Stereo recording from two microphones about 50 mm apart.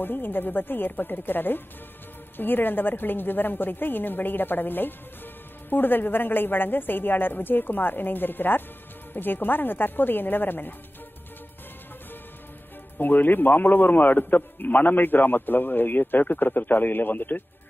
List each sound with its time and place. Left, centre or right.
0.0 s a woman's voice: left
12.9 s a man's voice: left